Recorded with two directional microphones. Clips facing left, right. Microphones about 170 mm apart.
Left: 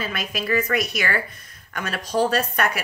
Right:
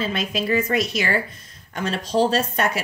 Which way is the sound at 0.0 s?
25° right (ahead or behind).